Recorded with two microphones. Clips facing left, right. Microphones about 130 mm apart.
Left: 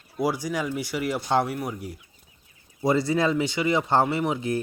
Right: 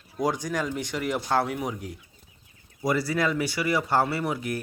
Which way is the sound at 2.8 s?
25° left (ahead or behind).